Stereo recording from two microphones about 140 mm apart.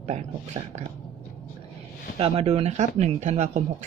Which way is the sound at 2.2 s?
45° right (ahead or behind).